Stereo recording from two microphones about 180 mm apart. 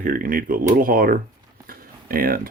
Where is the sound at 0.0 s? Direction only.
50° right (ahead or behind).